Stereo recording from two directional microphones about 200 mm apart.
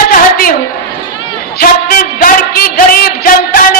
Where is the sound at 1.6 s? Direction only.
45° left (ahead or behind).